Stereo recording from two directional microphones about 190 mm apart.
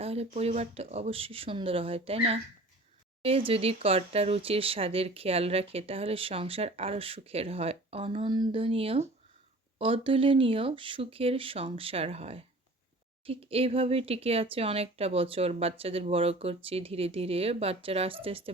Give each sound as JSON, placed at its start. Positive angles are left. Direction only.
{"t": 0.0, "sound": "speech", "side_deg": -30}